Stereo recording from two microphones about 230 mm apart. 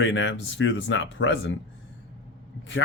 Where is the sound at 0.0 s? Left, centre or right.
Left.